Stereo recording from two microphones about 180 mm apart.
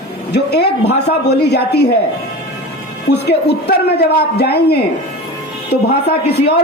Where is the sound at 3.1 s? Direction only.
65° left (ahead or behind).